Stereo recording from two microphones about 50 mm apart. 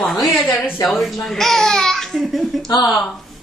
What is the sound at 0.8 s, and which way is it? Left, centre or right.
A woman's voice, centre.